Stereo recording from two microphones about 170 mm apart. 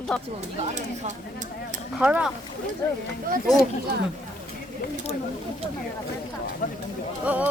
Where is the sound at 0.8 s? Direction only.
45° right (ahead or behind).